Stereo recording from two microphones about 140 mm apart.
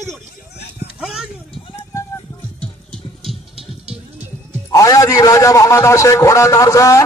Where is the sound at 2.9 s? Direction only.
Centre (ahead or behind).